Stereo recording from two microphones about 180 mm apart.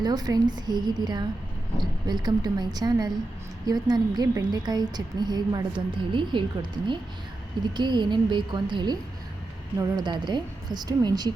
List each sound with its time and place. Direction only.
0.0 s a woman's voice: 20° right (ahead or behind)